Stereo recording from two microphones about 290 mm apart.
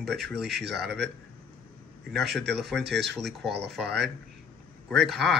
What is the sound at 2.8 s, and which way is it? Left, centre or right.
Speech, right.